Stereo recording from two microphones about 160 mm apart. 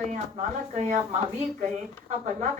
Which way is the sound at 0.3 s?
45° right (ahead or behind).